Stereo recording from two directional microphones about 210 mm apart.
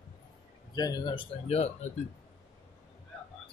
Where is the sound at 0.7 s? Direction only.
20° left (ahead or behind).